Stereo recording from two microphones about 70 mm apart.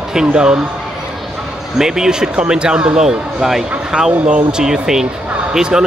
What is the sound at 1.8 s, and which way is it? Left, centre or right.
Speech, centre.